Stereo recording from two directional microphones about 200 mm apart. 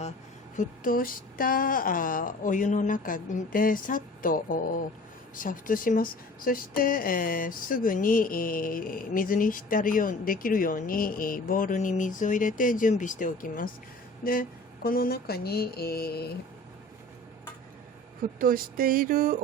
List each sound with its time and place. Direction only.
0.5 s speech: 40° left (ahead or behind)
14.8 s speech: 50° left (ahead or behind)
18.3 s a sound: 45° right (ahead or behind)